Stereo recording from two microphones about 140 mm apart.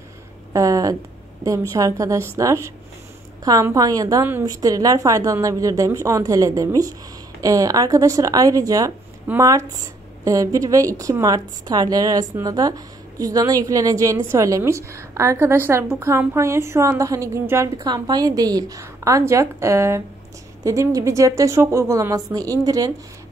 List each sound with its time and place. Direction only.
0.5 s a woman's voice: 25° right (ahead or behind)